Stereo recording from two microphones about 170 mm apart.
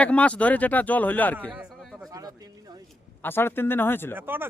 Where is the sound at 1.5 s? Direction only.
Centre (ahead or behind).